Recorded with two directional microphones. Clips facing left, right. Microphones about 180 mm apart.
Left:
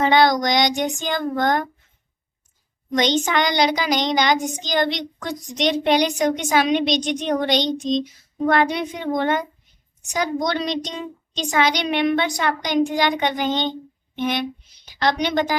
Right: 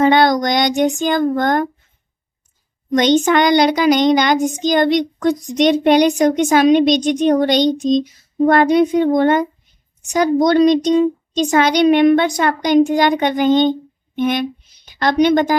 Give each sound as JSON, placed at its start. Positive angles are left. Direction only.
{"t": 0.0, "sound": "a child's voice", "side_deg": -50}
{"t": 2.9, "sound": "a child's voice", "side_deg": -50}